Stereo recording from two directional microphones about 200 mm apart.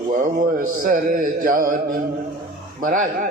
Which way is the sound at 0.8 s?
45° right (ahead or behind).